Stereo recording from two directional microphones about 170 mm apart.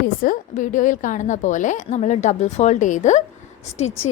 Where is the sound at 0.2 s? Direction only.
50° left (ahead or behind).